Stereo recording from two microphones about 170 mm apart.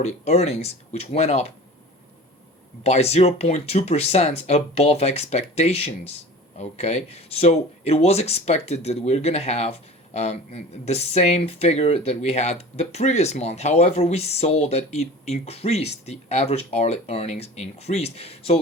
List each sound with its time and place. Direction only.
0.0 s speech: 40° left (ahead or behind)
2.8 s speech: 40° left (ahead or behind)